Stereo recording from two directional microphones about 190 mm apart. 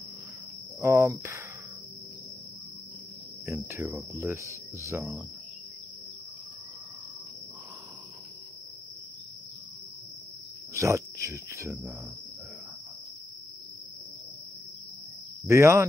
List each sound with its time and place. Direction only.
0.7 s cricket: 15° right (ahead or behind)
3.4 s cricket: 15° right (ahead or behind)
10.7 s speech: 15° right (ahead or behind)
15.4 s cricket: 15° right (ahead or behind)